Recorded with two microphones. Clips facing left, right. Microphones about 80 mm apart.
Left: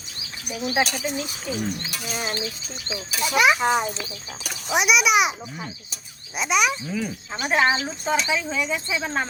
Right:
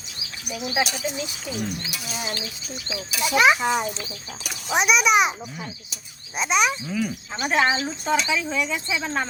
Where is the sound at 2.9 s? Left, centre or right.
Left.